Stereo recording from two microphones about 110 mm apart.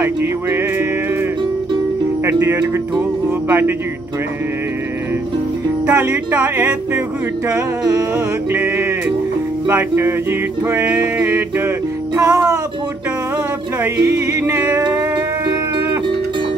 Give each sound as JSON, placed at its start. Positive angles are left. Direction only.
{"t": 0.0, "sound": "music", "side_deg": -20}
{"t": 2.2, "sound": "music", "side_deg": -20}
{"t": 5.9, "sound": "music", "side_deg": -15}
{"t": 7.4, "sound": "music", "side_deg": -30}
{"t": 12.2, "sound": "music", "side_deg": -30}
{"t": 14.0, "sound": "music", "side_deg": -25}
{"t": 14.8, "sound": "music", "side_deg": -40}